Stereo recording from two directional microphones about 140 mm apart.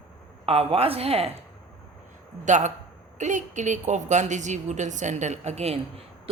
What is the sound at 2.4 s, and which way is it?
A woman's voice, 60° right (ahead or behind).